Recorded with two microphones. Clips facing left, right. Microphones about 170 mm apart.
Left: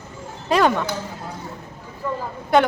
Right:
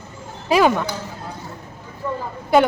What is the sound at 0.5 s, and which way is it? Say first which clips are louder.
Speech: right 2 dB; 5° right (ahead or behind).